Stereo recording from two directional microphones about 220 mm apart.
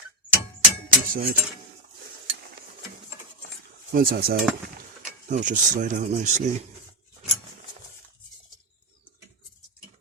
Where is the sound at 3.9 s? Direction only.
40° right (ahead or behind).